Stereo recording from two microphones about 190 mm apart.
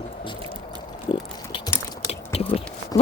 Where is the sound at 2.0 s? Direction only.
30° left (ahead or behind).